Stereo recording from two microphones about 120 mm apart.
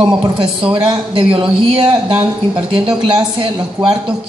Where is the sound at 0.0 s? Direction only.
45° right (ahead or behind).